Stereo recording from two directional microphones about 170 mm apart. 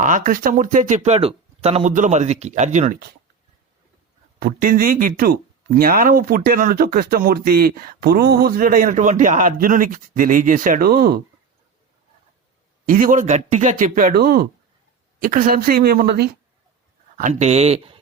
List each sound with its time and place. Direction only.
0.0 s speech: 50° right (ahead or behind)
4.4 s speech: 55° right (ahead or behind)
12.9 s speech: 50° right (ahead or behind)
15.2 s speech: 55° right (ahead or behind)
17.2 s speech: 45° right (ahead or behind)